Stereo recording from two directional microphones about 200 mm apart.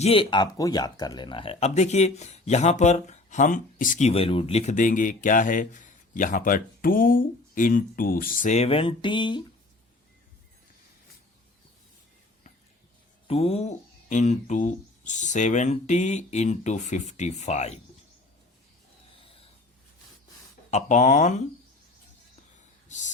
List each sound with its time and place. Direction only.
0.0 s speech: 25° left (ahead or behind)
13.2 s speech: 30° left (ahead or behind)
19.2 s snort: 30° left (ahead or behind)
20.7 s speech: 35° left (ahead or behind)
22.9 s a sound: 35° left (ahead or behind)